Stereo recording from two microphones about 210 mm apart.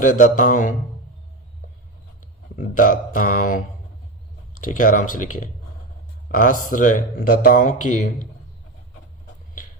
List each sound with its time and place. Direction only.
0.0 s speech: 40° left (ahead or behind)
2.6 s speech: 40° left (ahead or behind)